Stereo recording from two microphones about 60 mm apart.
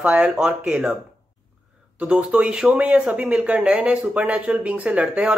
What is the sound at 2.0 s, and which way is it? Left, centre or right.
Speech, centre.